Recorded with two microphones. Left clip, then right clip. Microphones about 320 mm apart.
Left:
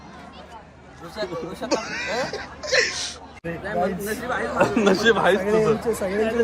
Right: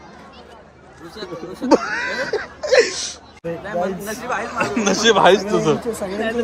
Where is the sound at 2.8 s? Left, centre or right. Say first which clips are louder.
Right 5 dB; centre.